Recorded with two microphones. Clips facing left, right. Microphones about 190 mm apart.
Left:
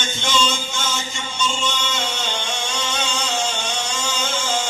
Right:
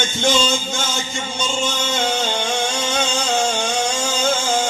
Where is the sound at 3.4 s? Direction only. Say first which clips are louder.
Right 5 dB; 50° right (ahead or behind).